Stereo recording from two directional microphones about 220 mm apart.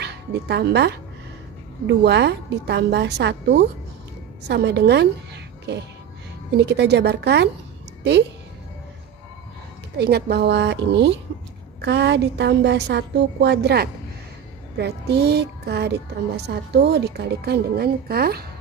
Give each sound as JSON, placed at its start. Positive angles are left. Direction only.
{"t": 0.0, "sound": "a woman's voice", "side_deg": -50}
{"t": 9.9, "sound": "speech", "side_deg": -45}